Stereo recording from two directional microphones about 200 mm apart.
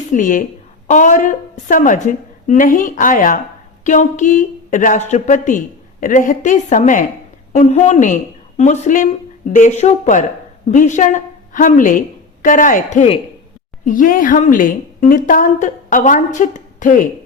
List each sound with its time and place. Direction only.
0.1 s a woman's voice: 40° left (ahead or behind)